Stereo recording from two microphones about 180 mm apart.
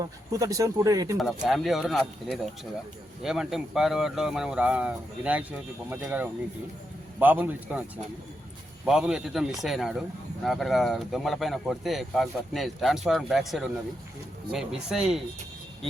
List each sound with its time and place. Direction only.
0.0 s speech: 20° right (ahead or behind)
1.2 s a man's voice: centre (ahead or behind)